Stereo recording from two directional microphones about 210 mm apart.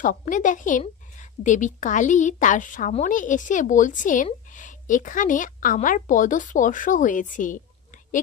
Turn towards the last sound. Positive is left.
turn(degrees=40)  # may be behind; listen again after turning